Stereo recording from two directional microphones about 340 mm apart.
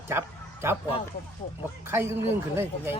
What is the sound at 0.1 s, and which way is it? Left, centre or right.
Speech, centre.